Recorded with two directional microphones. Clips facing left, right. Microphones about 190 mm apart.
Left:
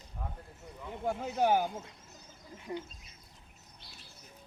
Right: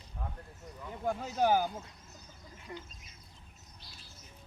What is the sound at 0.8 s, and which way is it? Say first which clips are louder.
Speech: even; 10° left (ahead or behind).